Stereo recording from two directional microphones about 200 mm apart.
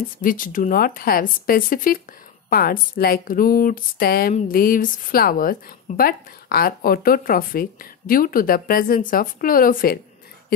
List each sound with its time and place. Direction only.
0.2 s a woman's voice: 45° left (ahead or behind)